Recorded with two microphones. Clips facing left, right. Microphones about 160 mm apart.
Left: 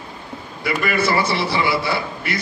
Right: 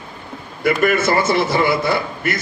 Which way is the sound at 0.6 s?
50° right (ahead or behind).